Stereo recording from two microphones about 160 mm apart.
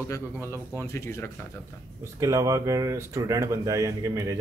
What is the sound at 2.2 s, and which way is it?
Speech, 20° right (ahead or behind).